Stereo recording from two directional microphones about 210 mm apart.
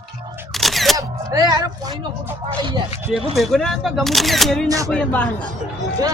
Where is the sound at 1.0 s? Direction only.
15° right (ahead or behind).